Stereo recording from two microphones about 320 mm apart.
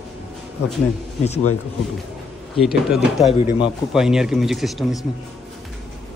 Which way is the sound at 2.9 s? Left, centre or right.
Centre.